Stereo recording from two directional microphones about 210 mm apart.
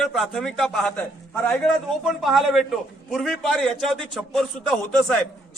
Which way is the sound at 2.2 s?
Centre (ahead or behind).